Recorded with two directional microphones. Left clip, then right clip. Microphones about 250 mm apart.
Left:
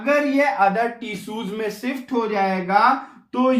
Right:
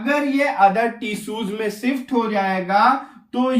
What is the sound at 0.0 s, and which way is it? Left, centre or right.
A man's voice, centre.